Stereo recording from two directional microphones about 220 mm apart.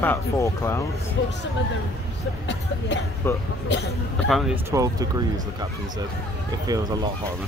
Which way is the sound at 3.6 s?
50° left (ahead or behind).